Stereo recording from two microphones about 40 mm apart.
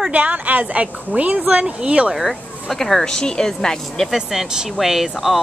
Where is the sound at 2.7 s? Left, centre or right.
Centre.